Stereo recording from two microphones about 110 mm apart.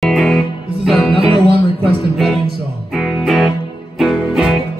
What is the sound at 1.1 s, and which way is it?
Music, 55° right (ahead or behind).